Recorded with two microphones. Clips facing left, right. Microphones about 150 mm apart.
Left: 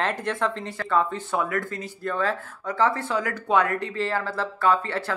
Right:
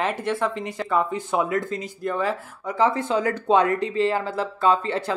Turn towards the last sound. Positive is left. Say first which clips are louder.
# right 2 dB
turn(degrees=-20)  # may be behind; listen again after turning